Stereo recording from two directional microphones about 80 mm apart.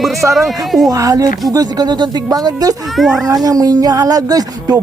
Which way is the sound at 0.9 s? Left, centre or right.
Right.